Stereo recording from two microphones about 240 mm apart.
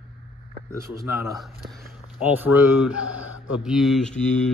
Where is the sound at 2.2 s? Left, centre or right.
Centre.